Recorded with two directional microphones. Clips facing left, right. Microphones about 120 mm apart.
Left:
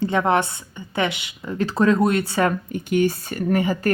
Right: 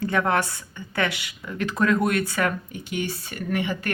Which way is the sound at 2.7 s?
50° left (ahead or behind).